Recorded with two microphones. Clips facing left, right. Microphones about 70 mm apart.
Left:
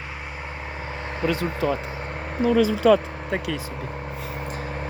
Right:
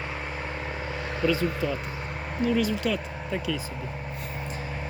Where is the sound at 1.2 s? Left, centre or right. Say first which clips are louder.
Even; left.